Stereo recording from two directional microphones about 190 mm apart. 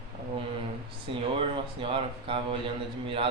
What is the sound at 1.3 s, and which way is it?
Speech, 30° right (ahead or behind).